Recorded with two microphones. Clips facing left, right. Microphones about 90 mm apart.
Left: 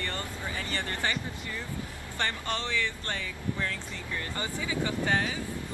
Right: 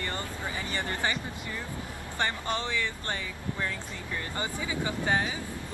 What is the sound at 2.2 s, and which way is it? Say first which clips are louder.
Speech: right 1 dB; 15° right (ahead or behind).